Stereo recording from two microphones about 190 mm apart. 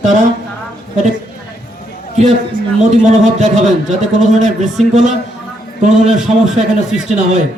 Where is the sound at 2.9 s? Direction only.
40° right (ahead or behind).